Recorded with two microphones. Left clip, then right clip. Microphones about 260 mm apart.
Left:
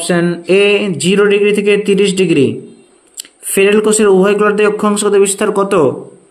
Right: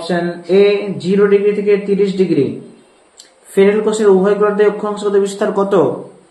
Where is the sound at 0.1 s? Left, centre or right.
Left.